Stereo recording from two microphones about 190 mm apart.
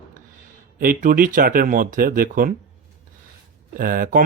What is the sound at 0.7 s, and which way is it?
Speech, 50° right (ahead or behind).